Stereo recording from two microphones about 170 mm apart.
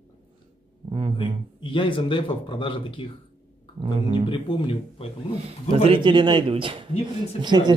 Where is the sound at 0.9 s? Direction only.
30° right (ahead or behind).